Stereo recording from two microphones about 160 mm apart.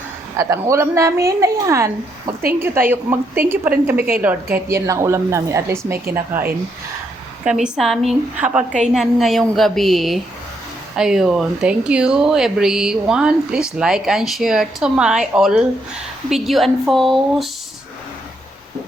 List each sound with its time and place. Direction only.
0.3 s a woman's voice: 15° right (ahead or behind)
7.4 s speech: 5° right (ahead or behind)